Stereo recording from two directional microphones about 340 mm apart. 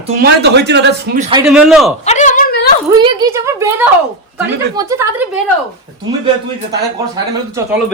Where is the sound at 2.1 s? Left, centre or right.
Left.